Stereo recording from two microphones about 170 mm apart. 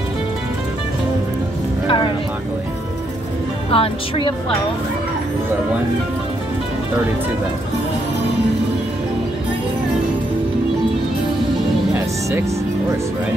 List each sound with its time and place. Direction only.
1.9 s speech: 30° left (ahead or behind)
3.7 s speech: 30° left (ahead or behind)
11.9 s music: 15° right (ahead or behind)